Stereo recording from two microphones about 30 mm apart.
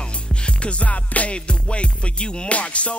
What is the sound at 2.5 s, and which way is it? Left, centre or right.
Music, left.